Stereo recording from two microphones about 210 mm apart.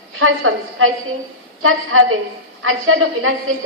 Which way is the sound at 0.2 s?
75° right (ahead or behind).